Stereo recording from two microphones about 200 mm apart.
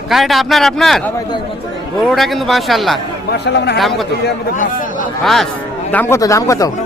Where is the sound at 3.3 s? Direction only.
55° left (ahead or behind).